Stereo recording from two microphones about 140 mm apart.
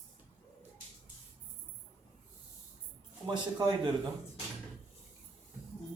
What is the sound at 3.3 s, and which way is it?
Speech, 30° right (ahead or behind).